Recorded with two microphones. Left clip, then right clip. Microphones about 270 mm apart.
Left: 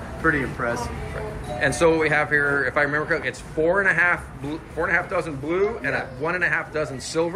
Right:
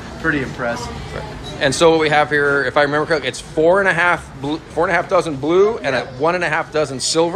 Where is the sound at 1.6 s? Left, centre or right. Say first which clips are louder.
Right 6 dB; centre.